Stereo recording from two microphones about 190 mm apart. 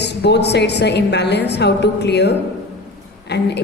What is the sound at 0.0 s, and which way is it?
A woman's voice, 60° left (ahead or behind).